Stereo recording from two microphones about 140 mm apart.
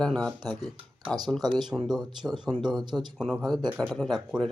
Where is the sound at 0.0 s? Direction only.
5° left (ahead or behind).